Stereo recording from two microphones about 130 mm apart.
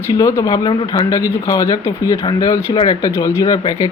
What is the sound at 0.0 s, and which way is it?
Speech, 25° left (ahead or behind).